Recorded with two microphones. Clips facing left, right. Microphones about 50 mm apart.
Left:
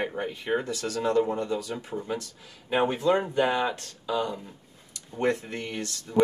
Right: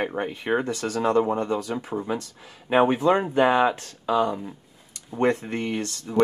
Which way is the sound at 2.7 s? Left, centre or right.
Right.